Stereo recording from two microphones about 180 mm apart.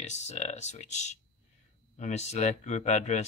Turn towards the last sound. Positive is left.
turn(degrees=40)  # may be behind; listen again after turning